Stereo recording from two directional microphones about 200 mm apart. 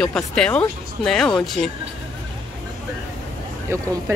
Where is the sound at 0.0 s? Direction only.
5° left (ahead or behind).